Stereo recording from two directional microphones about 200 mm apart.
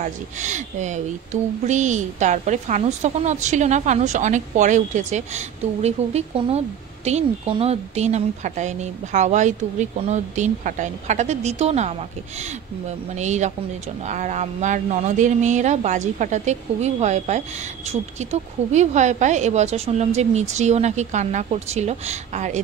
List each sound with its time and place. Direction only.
0.0 s speech: 35° right (ahead or behind)
13.1 s speech: 35° right (ahead or behind)